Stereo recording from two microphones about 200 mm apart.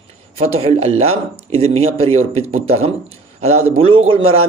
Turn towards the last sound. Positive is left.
turn(degrees=-30)  # may be behind; listen again after turning